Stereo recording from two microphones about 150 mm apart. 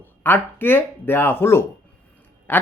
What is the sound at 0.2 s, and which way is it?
Speech, 15° left (ahead or behind).